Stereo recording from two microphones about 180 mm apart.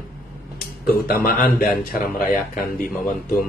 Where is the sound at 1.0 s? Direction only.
55° left (ahead or behind).